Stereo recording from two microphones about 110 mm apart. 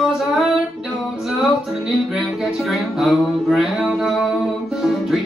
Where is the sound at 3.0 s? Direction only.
Centre (ahead or behind).